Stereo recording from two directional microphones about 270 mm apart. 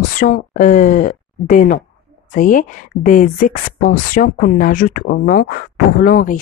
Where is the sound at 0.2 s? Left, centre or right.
Left.